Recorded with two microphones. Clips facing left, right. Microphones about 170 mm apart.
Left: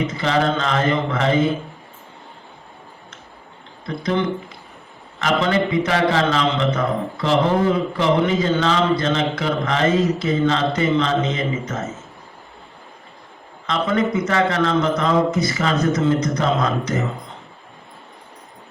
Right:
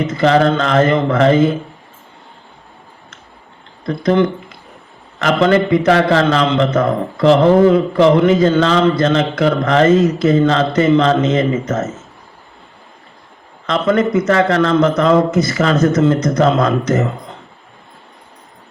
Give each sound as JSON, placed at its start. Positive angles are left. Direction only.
{"t": 0.2, "sound": "a man's voice", "side_deg": -55}
{"t": 3.8, "sound": "a man's voice", "side_deg": -50}
{"t": 13.7, "sound": "a man's voice", "side_deg": -55}